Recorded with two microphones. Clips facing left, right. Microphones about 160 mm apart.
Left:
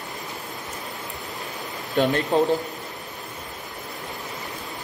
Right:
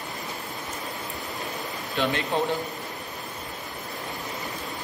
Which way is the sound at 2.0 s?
50° left (ahead or behind).